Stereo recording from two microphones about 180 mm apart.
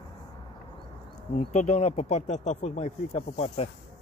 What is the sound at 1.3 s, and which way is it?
Speech, 40° left (ahead or behind).